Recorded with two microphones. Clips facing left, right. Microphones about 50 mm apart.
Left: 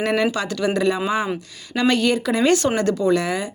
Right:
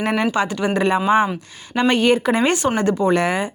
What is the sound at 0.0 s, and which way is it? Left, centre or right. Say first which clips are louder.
Speech: right 1 dB; right.